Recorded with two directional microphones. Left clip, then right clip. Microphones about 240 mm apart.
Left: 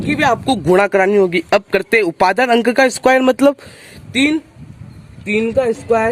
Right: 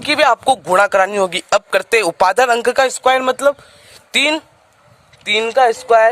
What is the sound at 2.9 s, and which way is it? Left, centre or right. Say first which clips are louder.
Speech: left 2 dB; centre.